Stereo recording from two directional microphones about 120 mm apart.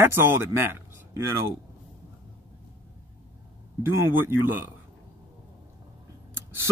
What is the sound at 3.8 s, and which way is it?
Speech, 20° right (ahead or behind).